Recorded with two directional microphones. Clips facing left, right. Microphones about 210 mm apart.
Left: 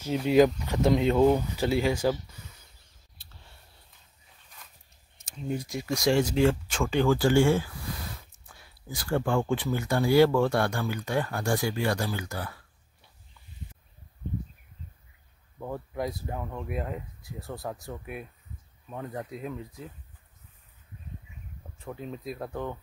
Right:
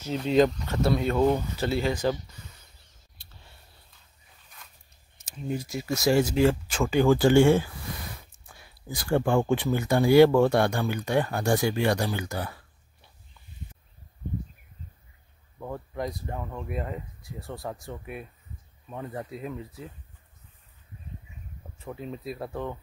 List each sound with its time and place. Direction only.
0.0 s speech: 10° left (ahead or behind)
5.1 s speech: centre (ahead or behind)
7.1 s speech: 20° right (ahead or behind)
15.6 s speech: 5° left (ahead or behind)
21.7 s speech: centre (ahead or behind)